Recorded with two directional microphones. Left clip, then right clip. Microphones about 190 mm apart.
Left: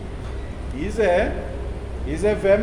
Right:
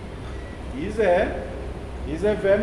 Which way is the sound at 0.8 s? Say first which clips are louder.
Left 1 dB; 30° left (ahead or behind).